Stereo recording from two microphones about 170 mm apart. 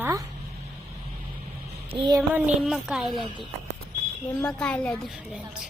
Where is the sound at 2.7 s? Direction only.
Centre (ahead or behind).